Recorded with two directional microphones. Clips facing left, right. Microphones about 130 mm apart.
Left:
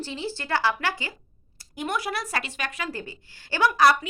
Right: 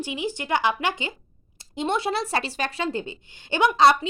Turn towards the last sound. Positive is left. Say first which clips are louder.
# right 2 dB
turn(degrees=-25)  # may be behind; listen again after turning